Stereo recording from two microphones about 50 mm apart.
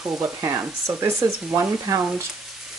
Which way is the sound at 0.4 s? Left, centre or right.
Right.